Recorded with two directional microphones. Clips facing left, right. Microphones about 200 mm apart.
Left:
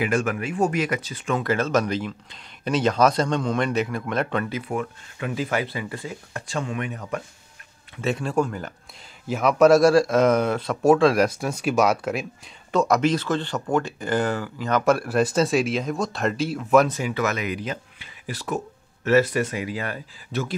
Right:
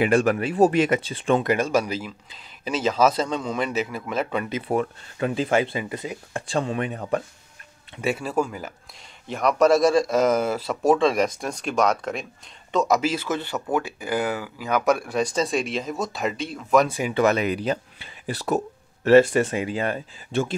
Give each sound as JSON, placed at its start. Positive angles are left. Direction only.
{"t": 0.0, "sound": "speech", "side_deg": -30}
{"t": 1.5, "sound": "speech", "side_deg": -10}
{"t": 4.5, "sound": "speech", "side_deg": -30}
{"t": 8.0, "sound": "speech", "side_deg": -5}
{"t": 17.1, "sound": "speech", "side_deg": -30}